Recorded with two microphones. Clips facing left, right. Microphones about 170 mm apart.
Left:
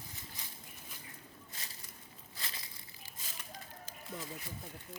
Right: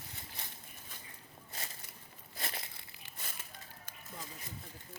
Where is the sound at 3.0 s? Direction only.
60° right (ahead or behind).